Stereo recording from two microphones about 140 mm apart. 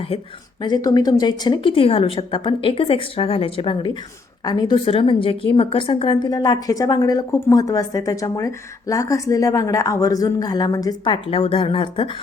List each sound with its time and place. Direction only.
0.6 s a woman's voice: 30° left (ahead or behind)